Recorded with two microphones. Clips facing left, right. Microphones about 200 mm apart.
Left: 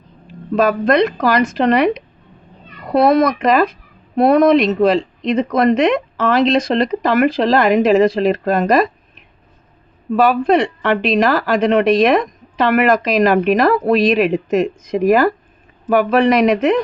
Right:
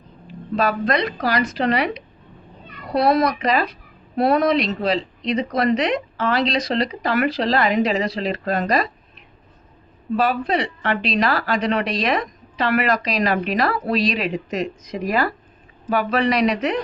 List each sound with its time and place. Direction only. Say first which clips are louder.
0.5 s a woman's voice: left 7 dB; 50° left (ahead or behind)
10.2 s a woman's voice: left 7 dB; 50° left (ahead or behind)